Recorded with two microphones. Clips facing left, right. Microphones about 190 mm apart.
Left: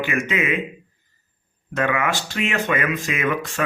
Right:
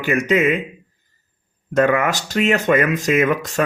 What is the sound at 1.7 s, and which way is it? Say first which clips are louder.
A man's voice: right 6 dB; 40° right (ahead or behind).